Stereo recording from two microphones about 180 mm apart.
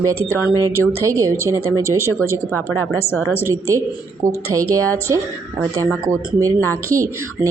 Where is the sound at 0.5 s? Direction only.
20° right (ahead or behind).